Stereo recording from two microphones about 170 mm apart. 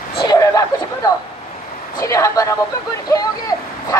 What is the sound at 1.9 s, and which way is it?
Speech, 20° left (ahead or behind).